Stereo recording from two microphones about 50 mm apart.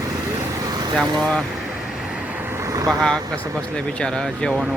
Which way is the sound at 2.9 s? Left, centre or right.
Centre.